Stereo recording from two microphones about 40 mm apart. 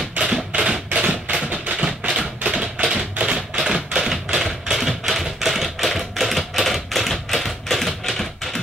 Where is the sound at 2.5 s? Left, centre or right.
Centre.